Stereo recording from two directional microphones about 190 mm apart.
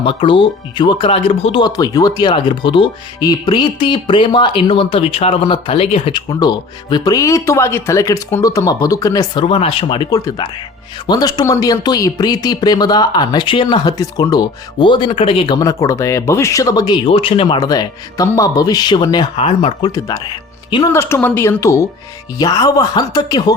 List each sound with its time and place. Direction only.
0.0 s speech: 25° left (ahead or behind)
20.9 s a woman's voice: 15° left (ahead or behind)